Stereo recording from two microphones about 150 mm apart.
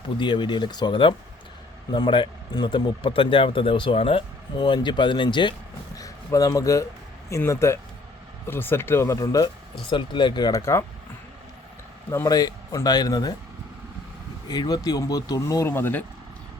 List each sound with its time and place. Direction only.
0.2 s speech: 30° left (ahead or behind)
12.1 s speech: 25° left (ahead or behind)
14.4 s speech: 25° left (ahead or behind)